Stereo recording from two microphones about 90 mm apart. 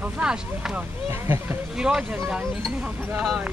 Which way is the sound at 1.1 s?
25° right (ahead or behind).